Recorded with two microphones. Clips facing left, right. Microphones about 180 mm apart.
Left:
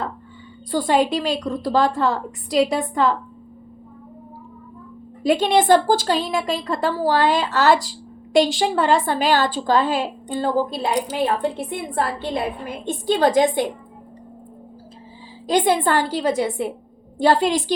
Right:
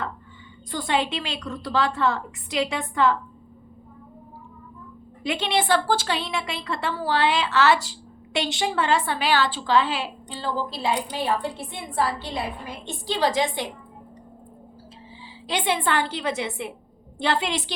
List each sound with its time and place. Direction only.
0.7 s a woman's voice: 35° left (ahead or behind)
5.2 s a woman's voice: 40° left (ahead or behind)
15.4 s a woman's voice: 40° left (ahead or behind)